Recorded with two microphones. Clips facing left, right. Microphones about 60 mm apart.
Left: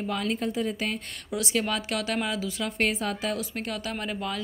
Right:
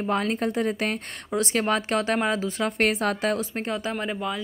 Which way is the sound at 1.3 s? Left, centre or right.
Right.